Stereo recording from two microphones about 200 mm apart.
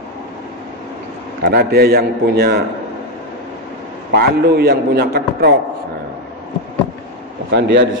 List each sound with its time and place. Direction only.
1.4 s a man's voice: 50° right (ahead or behind)
4.1 s a man's voice: 50° right (ahead or behind)
7.5 s a man's voice: 60° right (ahead or behind)